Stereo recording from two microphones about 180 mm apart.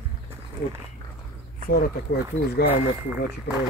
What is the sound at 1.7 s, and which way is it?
Speech, 60° left (ahead or behind).